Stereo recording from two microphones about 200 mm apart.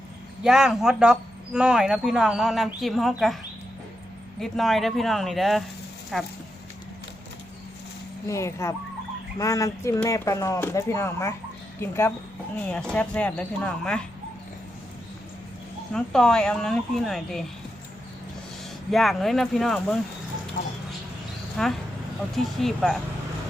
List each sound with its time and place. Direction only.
0.4 s speech: centre (ahead or behind)
4.4 s speech: centre (ahead or behind)
8.3 s speech: 15° left (ahead or behind)
15.9 s speech: 5° left (ahead or behind)
18.9 s speech: centre (ahead or behind)
21.6 s speech: 5° left (ahead or behind)